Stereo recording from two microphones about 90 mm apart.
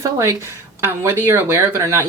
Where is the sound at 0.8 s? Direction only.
25° right (ahead or behind).